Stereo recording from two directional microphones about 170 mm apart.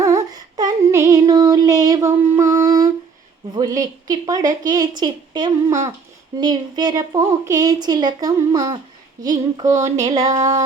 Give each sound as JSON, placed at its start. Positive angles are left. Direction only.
{"t": 0.0, "sound": "child singing", "side_deg": -20}
{"t": 3.5, "sound": "a woman's voice", "side_deg": -20}